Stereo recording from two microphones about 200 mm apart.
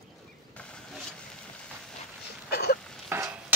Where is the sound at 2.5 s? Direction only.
50° left (ahead or behind).